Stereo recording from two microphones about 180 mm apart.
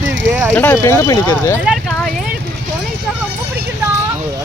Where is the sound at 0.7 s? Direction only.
15° left (ahead or behind).